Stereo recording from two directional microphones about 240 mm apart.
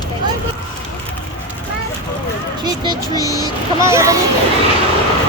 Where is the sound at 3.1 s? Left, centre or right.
Centre.